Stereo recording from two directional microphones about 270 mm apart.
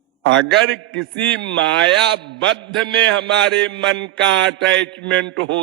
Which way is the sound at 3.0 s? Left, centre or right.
Right.